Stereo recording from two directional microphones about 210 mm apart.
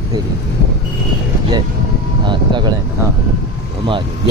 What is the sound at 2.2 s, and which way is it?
Speech, 20° right (ahead or behind).